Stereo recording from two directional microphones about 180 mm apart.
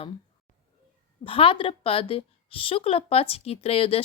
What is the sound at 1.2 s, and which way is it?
A woman's voice, 30° left (ahead or behind).